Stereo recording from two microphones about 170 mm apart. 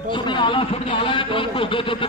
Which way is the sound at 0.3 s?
30° left (ahead or behind).